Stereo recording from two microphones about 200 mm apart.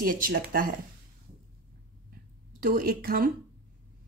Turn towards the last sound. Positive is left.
turn(degrees=-45)  # may be behind; listen again after turning